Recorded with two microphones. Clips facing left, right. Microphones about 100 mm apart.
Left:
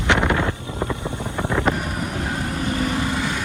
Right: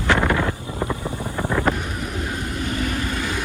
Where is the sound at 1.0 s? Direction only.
20° left (ahead or behind).